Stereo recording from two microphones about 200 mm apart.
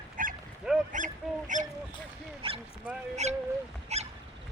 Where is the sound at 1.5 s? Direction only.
40° right (ahead or behind).